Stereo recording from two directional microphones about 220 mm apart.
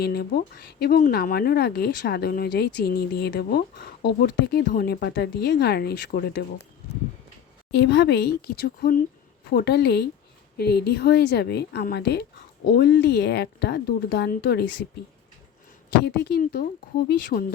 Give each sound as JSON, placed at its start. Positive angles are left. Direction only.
{"t": 0.0, "sound": "speech", "side_deg": 45}
{"t": 7.7, "sound": "speech", "side_deg": 50}
{"t": 16.0, "sound": "speech", "side_deg": 45}